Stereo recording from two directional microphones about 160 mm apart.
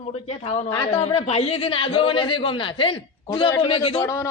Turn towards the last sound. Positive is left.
turn(degrees=35)  # may be behind; listen again after turning